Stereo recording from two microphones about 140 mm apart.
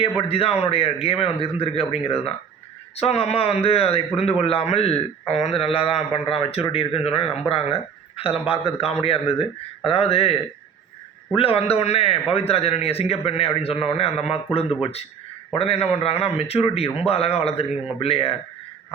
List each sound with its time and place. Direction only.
0.2 s a man's voice: 40° left (ahead or behind)
11.3 s a man's voice: 45° left (ahead or behind)